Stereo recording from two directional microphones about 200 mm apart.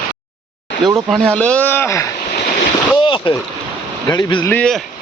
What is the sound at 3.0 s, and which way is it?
Speech, 25° left (ahead or behind).